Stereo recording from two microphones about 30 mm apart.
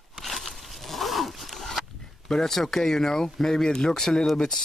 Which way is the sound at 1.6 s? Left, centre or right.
Centre.